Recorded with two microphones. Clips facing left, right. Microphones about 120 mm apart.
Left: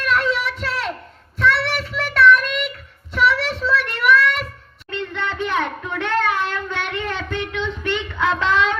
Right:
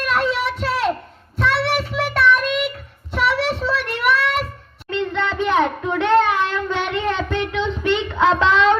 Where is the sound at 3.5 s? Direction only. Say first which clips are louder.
Left 1 dB; 30° right (ahead or behind).